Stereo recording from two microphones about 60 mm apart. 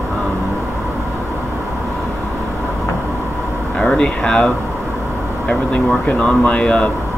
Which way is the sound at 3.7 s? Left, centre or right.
Centre.